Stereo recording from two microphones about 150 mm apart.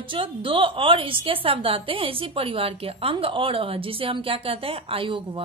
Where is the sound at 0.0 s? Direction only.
35° right (ahead or behind).